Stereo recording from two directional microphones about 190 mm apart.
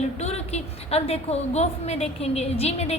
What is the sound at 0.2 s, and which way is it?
A woman's voice, 35° left (ahead or behind).